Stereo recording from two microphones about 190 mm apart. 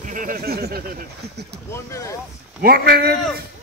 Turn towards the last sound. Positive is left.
turn(degrees=-55)  # may be behind; listen again after turning